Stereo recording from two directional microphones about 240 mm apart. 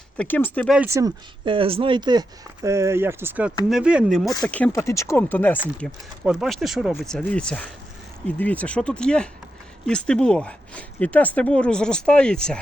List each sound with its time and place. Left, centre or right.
0.2 s speech: centre
0.8 s speech: centre
5.5 s speech: centre